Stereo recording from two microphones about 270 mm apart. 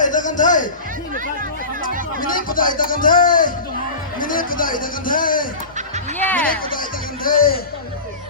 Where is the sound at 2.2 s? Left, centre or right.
Left.